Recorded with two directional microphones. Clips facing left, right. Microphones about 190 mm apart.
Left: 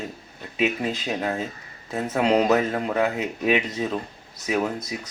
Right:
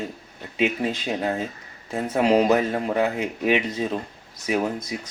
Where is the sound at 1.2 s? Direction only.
15° right (ahead or behind).